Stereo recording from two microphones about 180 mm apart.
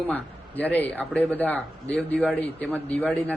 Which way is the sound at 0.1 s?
10° left (ahead or behind).